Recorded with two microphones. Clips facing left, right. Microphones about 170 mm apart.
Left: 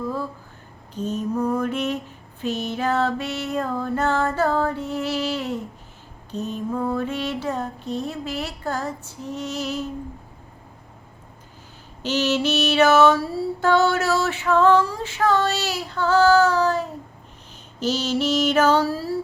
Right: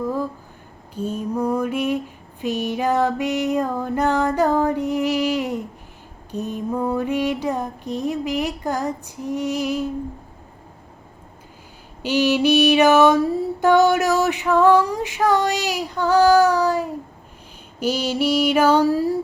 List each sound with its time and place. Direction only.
0.0 s a sound: 15° right (ahead or behind)
0.9 s female singing: 10° right (ahead or behind)
12.0 s female singing: 10° right (ahead or behind)